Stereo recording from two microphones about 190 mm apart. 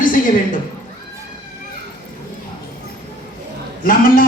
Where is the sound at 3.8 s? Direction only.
50° left (ahead or behind).